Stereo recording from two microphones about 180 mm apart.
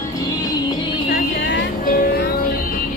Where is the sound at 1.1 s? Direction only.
65° left (ahead or behind).